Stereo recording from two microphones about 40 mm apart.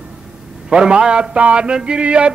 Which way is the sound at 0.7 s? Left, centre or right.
Right.